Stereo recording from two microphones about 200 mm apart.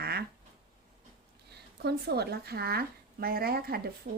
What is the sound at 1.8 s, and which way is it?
Speech, 55° right (ahead or behind).